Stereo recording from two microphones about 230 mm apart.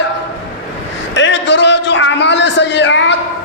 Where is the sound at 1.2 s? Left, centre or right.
Left.